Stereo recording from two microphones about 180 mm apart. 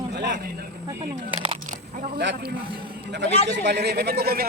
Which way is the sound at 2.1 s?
65° right (ahead or behind).